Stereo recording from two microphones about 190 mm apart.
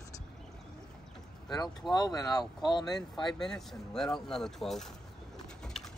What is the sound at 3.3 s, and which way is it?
Speech, centre (ahead or behind).